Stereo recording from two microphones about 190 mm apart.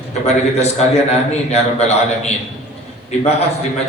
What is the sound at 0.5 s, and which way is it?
A man's voice, 35° left (ahead or behind).